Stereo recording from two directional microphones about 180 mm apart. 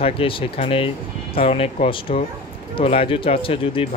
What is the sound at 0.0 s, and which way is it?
Speech, 30° left (ahead or behind).